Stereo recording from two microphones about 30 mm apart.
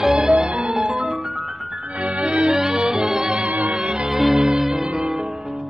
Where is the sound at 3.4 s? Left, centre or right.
Right.